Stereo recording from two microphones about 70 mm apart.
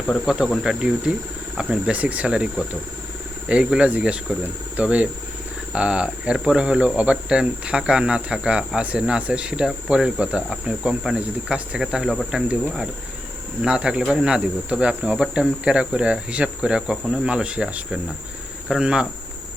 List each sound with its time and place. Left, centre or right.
0.3 s speech: centre
12.3 s speech: centre